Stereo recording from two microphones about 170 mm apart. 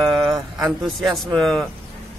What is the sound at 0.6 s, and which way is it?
A man's voice, centre (ahead or behind).